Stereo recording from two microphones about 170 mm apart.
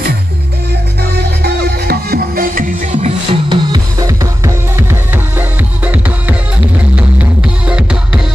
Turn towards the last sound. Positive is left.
turn(degrees=-5)  # may be behind; listen again after turning